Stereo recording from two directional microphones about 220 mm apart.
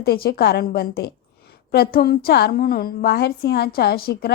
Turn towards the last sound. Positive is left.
turn(degrees=45)  # may be behind; listen again after turning